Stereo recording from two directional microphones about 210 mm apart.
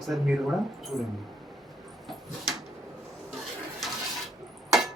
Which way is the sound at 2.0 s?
Centre (ahead or behind).